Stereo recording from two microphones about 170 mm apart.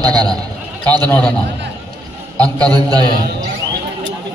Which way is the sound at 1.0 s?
10° left (ahead or behind).